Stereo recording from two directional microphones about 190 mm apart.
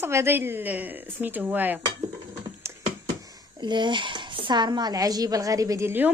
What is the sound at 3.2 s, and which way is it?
A woman's voice, 20° right (ahead or behind).